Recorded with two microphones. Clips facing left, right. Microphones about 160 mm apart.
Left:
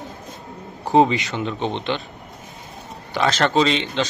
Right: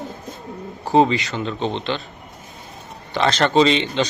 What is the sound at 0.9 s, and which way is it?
A man's voice, 15° left (ahead or behind).